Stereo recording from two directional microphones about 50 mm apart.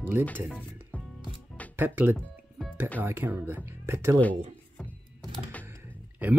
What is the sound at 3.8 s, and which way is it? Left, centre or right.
Speech, right.